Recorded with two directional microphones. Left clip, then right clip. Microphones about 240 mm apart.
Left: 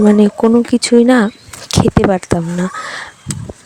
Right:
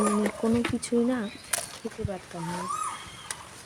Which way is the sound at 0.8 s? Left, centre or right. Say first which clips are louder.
Left 18 dB; left.